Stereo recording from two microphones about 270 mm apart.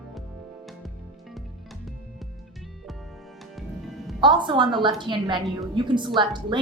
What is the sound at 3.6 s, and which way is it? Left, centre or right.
Music, centre.